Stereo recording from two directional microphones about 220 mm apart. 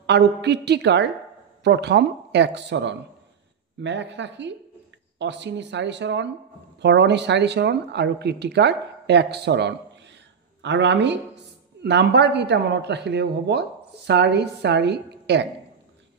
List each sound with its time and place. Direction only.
0.0 s speech: 50° right (ahead or behind)